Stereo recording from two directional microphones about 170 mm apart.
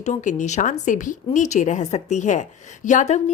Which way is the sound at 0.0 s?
45° left (ahead or behind).